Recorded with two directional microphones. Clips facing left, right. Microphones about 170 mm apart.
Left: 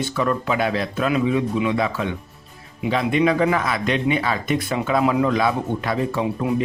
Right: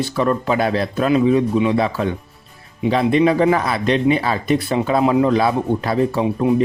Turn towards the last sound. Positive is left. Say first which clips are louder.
# right 5 dB
turn(degrees=-35)  # may be behind; listen again after turning